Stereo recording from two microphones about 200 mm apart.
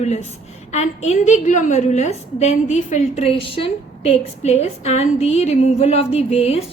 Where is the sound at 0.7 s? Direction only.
35° left (ahead or behind).